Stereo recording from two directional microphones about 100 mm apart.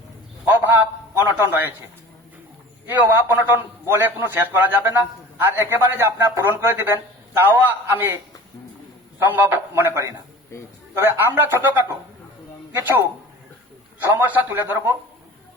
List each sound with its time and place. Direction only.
0.4 s a man's voice: 20° right (ahead or behind)
2.8 s speech: 20° right (ahead or behind)